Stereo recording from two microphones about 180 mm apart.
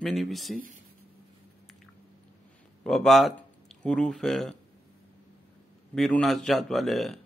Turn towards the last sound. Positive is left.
turn(degrees=0)  # may be behind; listen again after turning